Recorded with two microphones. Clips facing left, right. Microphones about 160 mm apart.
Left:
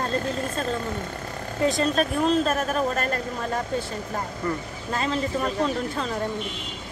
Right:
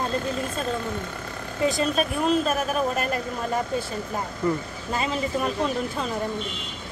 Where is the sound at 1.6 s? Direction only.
5° right (ahead or behind).